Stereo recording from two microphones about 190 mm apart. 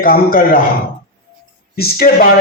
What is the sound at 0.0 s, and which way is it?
Speech, 50° left (ahead or behind).